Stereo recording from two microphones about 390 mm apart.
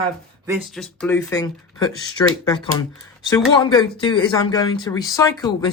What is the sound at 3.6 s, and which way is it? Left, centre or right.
Speech, centre.